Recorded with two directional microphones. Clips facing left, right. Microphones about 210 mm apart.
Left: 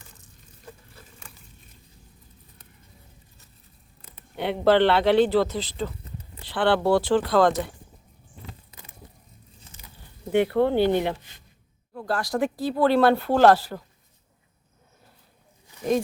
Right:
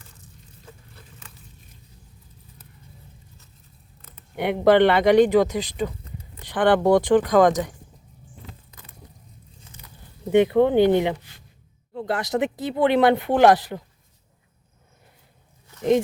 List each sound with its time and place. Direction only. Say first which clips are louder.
4.4 s speech: right 3 dB; 15° right (ahead or behind)
10.2 s speech: right 4 dB; 15° right (ahead or behind)
15.8 s speech: right 4 dB; 20° right (ahead or behind)